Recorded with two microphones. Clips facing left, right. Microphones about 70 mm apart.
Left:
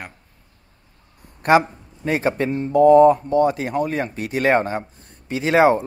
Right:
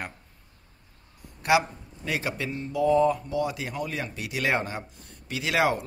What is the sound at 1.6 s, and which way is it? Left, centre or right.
Speech, left.